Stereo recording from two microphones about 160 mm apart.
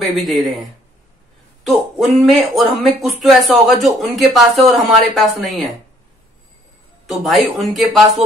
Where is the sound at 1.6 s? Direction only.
Centre (ahead or behind).